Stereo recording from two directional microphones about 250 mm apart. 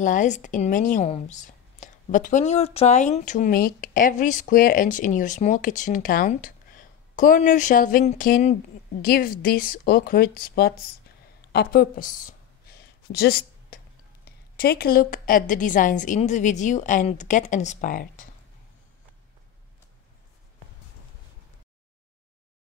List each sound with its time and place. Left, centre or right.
0.0 s speech: left
11.5 s a sound: left
14.6 s speech: left